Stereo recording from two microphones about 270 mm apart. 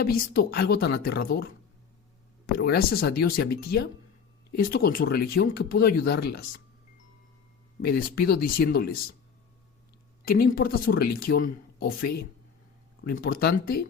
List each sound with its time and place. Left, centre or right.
0.0 s speech: left
2.6 s speech: left
7.8 s speech: left
10.2 s speech: left